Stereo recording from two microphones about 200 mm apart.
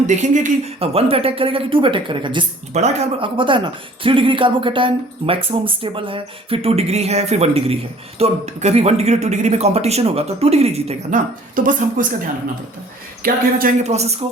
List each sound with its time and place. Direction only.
0.1 s speech: 35° right (ahead or behind)
13.2 s speech: 40° right (ahead or behind)